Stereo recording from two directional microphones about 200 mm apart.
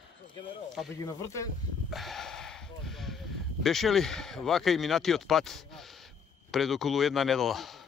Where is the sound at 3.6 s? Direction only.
Centre (ahead or behind).